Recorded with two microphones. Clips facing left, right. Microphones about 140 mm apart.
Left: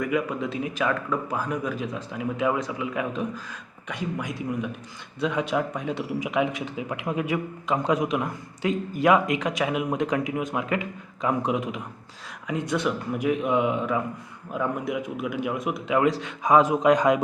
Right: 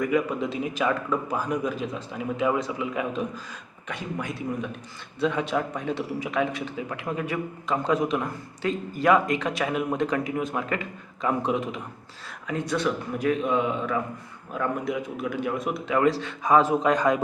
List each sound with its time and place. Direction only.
0.0 s a man's voice: 5° left (ahead or behind)